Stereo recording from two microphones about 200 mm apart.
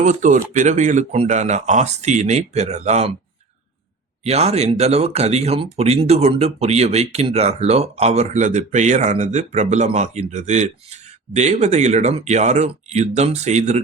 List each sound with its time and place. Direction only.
0.0 s speech: 40° right (ahead or behind)
4.2 s speech: 35° right (ahead or behind)